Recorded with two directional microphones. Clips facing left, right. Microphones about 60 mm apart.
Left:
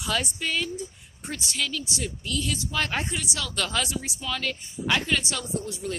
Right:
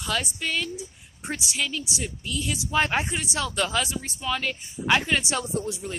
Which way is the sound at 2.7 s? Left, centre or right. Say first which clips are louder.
Right 6 dB; right.